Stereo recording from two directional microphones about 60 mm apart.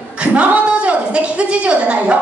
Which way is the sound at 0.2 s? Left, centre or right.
Right.